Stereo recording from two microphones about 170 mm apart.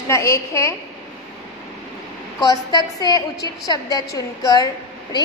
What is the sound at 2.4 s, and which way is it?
A woman's voice, 25° left (ahead or behind).